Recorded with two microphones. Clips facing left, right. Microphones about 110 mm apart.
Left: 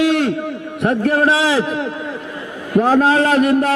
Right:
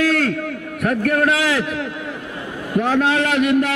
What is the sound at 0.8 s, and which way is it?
A man's voice, 30° left (ahead or behind).